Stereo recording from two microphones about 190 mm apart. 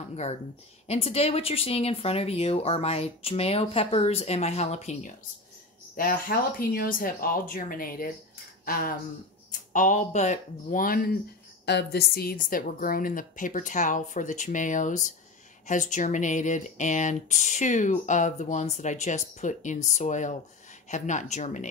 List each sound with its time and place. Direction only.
0.1 s speech: 35° left (ahead or behind)
5.9 s speech: 50° left (ahead or behind)